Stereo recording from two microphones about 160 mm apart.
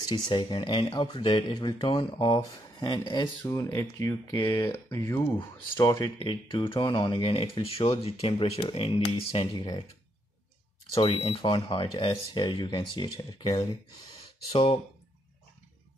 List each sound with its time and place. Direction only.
0.3 s speech: 30° left (ahead or behind)
11.0 s speech: 35° left (ahead or behind)